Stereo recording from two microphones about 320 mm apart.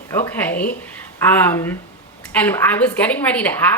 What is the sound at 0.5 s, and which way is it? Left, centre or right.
Speech, left.